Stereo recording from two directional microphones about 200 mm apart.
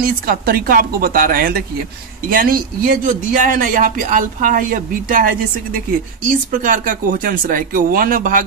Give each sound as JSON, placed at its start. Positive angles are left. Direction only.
{"t": 0.0, "sound": "speech", "side_deg": -45}